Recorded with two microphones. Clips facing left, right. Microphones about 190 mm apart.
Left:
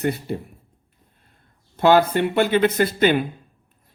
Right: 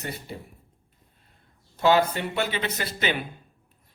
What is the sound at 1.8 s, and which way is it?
Speech, 55° left (ahead or behind).